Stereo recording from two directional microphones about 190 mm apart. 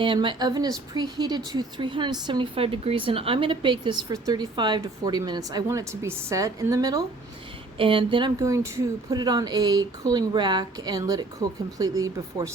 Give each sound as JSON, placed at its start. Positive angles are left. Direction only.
{"t": 0.0, "sound": "a woman's voice", "side_deg": -25}